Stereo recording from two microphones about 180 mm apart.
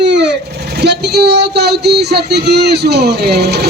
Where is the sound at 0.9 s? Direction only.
65° right (ahead or behind).